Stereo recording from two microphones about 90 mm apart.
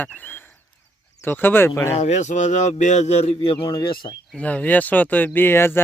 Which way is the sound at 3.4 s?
70° left (ahead or behind).